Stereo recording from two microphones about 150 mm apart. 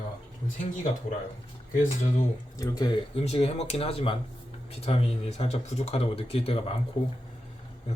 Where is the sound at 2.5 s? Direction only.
25° left (ahead or behind).